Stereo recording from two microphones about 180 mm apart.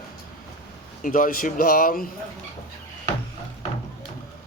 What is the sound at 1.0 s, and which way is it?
Speech, 50° left (ahead or behind).